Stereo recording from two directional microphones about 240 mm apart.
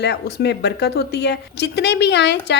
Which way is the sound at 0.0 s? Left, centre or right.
Left.